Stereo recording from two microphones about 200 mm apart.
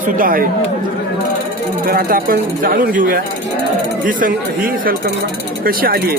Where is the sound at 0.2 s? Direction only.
45° right (ahead or behind).